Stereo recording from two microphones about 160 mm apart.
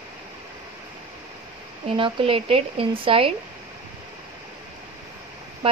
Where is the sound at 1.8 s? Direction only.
35° right (ahead or behind).